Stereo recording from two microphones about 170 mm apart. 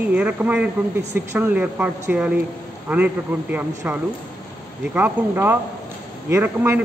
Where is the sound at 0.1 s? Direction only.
10° right (ahead or behind).